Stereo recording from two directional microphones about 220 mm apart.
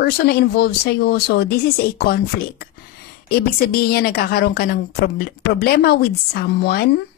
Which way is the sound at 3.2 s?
45° left (ahead or behind).